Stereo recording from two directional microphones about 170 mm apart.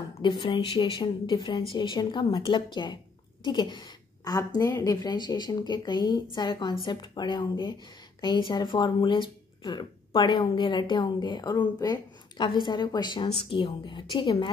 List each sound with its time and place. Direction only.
0.2 s speech: 25° left (ahead or behind)